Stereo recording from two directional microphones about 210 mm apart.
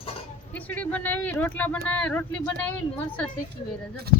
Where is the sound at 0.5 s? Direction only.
5° left (ahead or behind).